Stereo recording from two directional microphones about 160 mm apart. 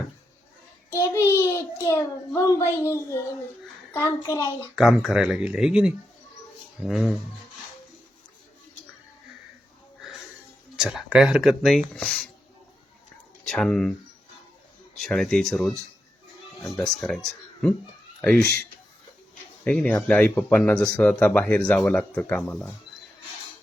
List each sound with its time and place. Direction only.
0.9 s a child's voice: 20° left (ahead or behind)
4.7 s speech: centre (ahead or behind)
10.8 s speech: 5° right (ahead or behind)
13.5 s speech: 5° left (ahead or behind)
14.9 s speech: centre (ahead or behind)
18.2 s speech: 5° left (ahead or behind)
19.6 s speech: 10° left (ahead or behind)